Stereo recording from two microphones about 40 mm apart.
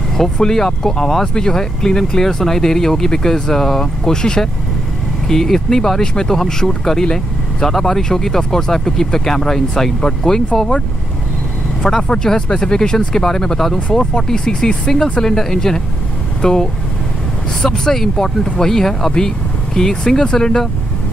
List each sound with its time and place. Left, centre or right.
0.4 s speech: centre
11.8 s speech: centre
17.6 s speech: centre